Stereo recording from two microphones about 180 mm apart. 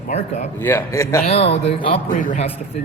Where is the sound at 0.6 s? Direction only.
10° left (ahead or behind).